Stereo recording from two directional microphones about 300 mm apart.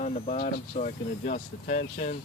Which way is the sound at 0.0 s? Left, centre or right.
Left.